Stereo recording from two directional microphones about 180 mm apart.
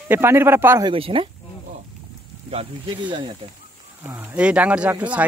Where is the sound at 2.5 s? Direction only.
30° right (ahead or behind).